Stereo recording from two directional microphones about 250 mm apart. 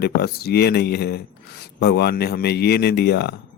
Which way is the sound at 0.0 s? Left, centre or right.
Left.